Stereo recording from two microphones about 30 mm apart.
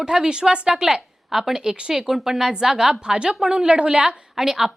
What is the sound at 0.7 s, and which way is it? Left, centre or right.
A woman's voice, centre.